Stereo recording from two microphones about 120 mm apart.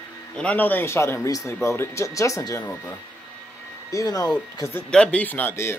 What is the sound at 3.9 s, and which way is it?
Speech, 30° left (ahead or behind).